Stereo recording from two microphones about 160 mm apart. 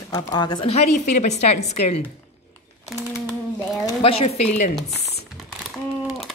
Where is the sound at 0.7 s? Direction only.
50° left (ahead or behind).